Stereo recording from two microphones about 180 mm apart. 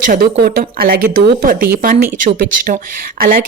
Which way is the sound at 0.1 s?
60° right (ahead or behind).